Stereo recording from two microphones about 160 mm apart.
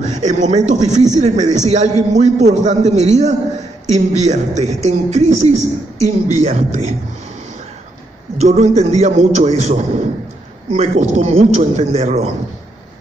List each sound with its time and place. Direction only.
0.0 s a man's voice: 50° right (ahead or behind)
8.4 s a man's voice: 45° right (ahead or behind)